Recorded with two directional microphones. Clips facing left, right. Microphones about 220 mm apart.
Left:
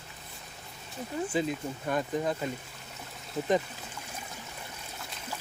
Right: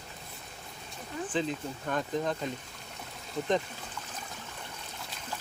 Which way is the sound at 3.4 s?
5° left (ahead or behind).